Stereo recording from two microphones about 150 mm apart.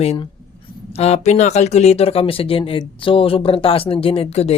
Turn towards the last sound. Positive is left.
turn(degrees=45)  # may be behind; listen again after turning